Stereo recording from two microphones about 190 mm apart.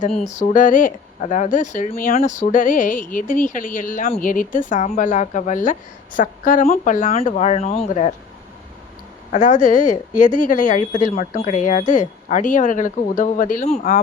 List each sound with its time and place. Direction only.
0.2 s speech: 40° left (ahead or behind)
9.3 s speech: 40° left (ahead or behind)